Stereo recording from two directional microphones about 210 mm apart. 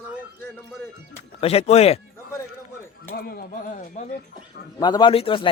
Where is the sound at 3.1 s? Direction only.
45° left (ahead or behind).